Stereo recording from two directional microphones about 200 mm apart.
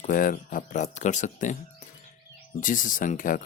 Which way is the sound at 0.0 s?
45° left (ahead or behind).